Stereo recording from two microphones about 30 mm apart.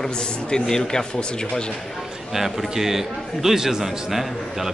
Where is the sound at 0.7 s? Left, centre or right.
Centre.